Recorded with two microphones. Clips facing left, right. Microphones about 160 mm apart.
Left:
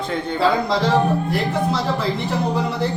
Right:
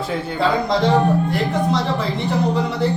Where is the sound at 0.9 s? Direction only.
5° left (ahead or behind).